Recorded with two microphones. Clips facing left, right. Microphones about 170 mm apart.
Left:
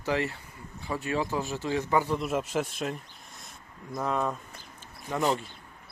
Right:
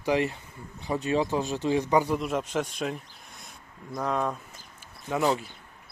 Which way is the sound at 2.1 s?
5° left (ahead or behind).